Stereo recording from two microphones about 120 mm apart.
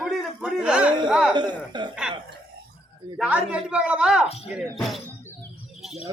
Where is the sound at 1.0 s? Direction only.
5° right (ahead or behind).